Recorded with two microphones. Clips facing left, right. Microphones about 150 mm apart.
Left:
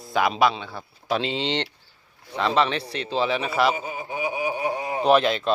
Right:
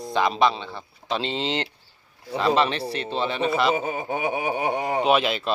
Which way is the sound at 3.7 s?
55° right (ahead or behind).